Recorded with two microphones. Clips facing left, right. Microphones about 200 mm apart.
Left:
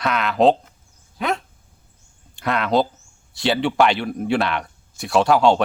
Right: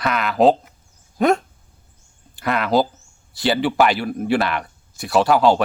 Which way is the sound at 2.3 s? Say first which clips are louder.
Right 1 dB; centre (ahead or behind).